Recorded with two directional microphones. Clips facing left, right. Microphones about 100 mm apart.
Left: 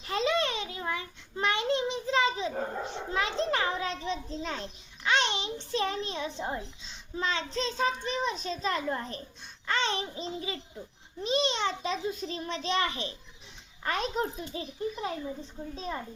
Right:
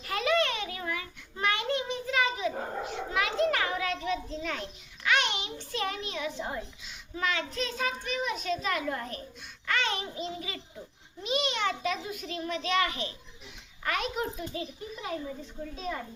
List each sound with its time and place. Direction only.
0.0 s a sound: 25° left (ahead or behind)
9.6 s babbling: 30° left (ahead or behind)
11.2 s a child's voice: 30° left (ahead or behind)
15.7 s a child's voice: 30° left (ahead or behind)